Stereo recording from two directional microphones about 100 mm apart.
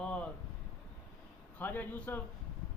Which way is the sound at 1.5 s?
15° left (ahead or behind).